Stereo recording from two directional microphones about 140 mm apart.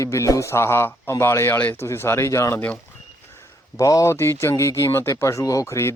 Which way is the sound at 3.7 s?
25° left (ahead or behind).